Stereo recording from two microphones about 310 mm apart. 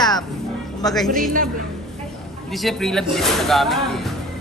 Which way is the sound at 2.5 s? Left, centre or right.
Centre.